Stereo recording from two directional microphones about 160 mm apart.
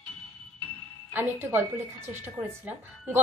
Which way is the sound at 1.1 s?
15° right (ahead or behind).